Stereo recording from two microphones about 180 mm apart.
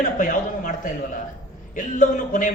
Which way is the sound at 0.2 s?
45° left (ahead or behind).